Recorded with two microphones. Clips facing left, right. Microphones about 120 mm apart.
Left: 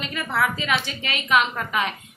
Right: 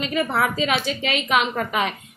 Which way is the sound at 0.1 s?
45° right (ahead or behind).